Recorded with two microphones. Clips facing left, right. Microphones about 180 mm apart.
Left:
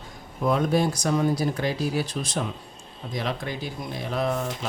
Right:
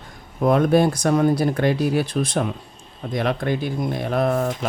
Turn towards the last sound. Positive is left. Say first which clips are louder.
# right 6 dB
turn(degrees=-55)  # may be behind; listen again after turning